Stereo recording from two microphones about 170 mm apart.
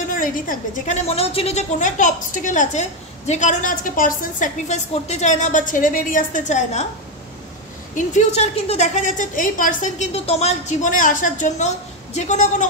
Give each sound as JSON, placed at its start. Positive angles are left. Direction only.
{"t": 0.1, "sound": "a woman's voice", "side_deg": 55}
{"t": 1.0, "sound": "a woman's voice", "side_deg": 35}
{"t": 7.9, "sound": "a woman's voice", "side_deg": 45}